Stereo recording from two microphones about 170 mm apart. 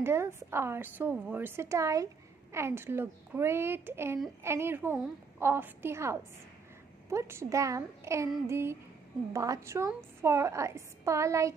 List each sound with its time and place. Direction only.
0.0 s a woman's voice: 15° right (ahead or behind)